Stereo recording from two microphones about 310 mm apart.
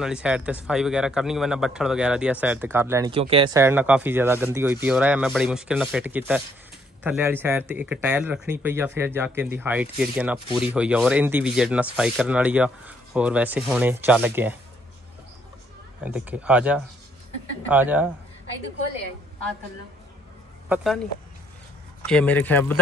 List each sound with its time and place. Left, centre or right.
0.0 s speech: centre
16.0 s speech: centre
20.6 s speech: centre